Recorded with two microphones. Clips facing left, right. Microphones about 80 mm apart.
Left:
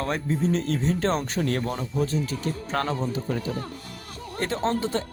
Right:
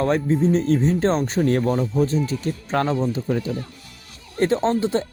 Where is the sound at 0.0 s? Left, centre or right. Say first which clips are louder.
Right 7 dB; right.